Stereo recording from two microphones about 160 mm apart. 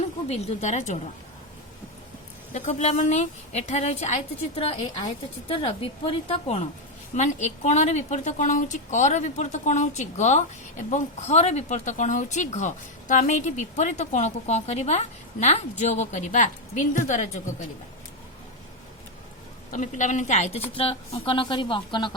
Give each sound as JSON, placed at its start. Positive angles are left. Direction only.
{"t": 0.3, "sound": "speech", "side_deg": 45}
{"t": 2.5, "sound": "a woman's voice", "side_deg": 45}
{"t": 19.7, "sound": "a woman's voice", "side_deg": 50}